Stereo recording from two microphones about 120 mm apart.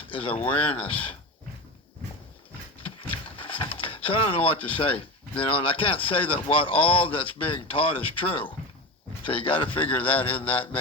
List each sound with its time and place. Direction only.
0.1 s a man's voice: 50° left (ahead or behind)
2.8 s a man's voice: 45° left (ahead or behind)